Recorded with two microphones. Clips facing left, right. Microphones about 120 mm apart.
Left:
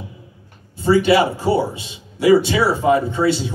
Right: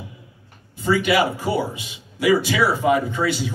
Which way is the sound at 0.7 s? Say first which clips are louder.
Left 5 dB; 30° left (ahead or behind).